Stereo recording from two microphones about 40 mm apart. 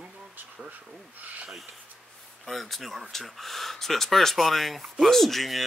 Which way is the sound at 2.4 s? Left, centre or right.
Centre.